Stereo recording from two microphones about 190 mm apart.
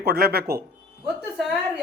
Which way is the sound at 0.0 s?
55° right (ahead or behind).